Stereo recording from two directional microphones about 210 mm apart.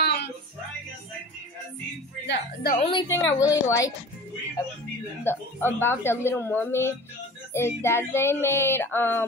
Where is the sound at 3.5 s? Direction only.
15° left (ahead or behind).